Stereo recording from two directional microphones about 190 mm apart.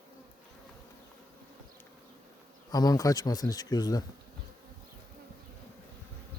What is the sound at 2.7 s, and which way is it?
Speech, 20° left (ahead or behind).